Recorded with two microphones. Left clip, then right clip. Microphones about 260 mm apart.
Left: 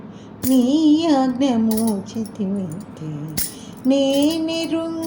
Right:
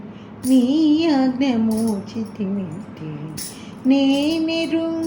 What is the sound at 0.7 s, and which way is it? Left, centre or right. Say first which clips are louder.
Music: left 1 dB; left.